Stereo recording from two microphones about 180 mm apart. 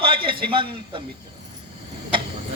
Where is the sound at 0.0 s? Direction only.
30° right (ahead or behind).